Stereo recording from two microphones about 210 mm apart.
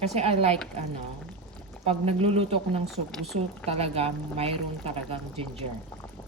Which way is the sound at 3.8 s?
30° right (ahead or behind).